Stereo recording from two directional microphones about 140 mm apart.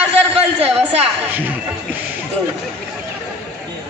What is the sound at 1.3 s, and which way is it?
Speech, 10° right (ahead or behind).